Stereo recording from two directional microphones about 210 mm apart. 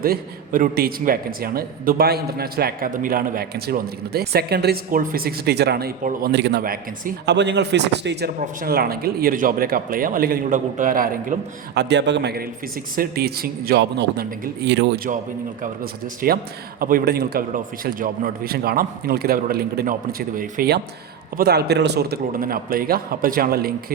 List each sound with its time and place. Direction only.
0.0 s a man's voice: 45° right (ahead or behind)
6.3 s a man's voice: 50° right (ahead or behind)